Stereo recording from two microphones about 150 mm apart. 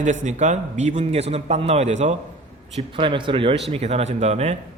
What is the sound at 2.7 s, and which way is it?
A man's voice, 35° right (ahead or behind).